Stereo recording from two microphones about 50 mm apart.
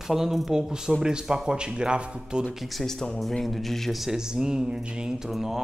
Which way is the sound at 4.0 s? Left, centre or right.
Centre.